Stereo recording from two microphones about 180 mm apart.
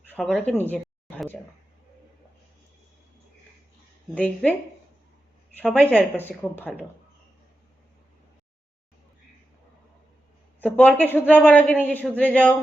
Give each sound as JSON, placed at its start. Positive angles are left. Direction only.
{"t": 0.1, "sound": "speech", "side_deg": 5}
{"t": 0.6, "sound": "a sound", "side_deg": 10}
{"t": 4.1, "sound": "a man's voice", "side_deg": 10}
{"t": 5.5, "sound": "a man's voice", "side_deg": 5}
{"t": 10.6, "sound": "a man's voice", "side_deg": 10}